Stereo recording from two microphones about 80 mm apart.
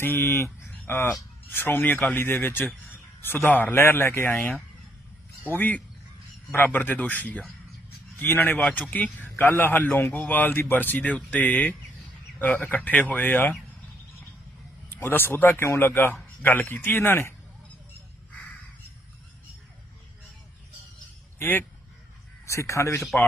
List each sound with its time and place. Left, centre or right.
0.0 s a man's voice: left
0.7 s a sound: left
1.5 s a man's voice: left
14.8 s a man's voice: left
21.3 s speech: left
22.4 s speech: left